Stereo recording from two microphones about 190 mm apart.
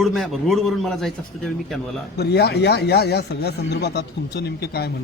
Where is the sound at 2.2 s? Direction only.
60° left (ahead or behind).